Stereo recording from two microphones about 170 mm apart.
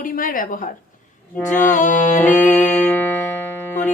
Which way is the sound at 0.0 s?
55° left (ahead or behind).